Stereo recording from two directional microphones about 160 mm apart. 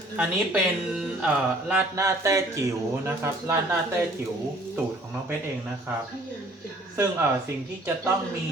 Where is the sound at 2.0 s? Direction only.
20° right (ahead or behind).